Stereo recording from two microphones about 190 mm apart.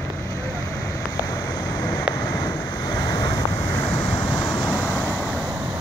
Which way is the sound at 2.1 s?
20° left (ahead or behind).